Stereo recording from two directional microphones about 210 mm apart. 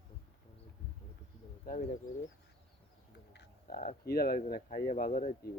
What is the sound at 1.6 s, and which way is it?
Speech, 40° left (ahead or behind).